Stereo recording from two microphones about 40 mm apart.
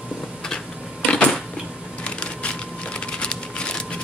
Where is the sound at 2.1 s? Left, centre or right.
Left.